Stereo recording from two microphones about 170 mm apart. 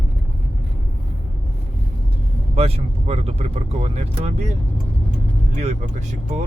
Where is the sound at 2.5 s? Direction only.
35° right (ahead or behind).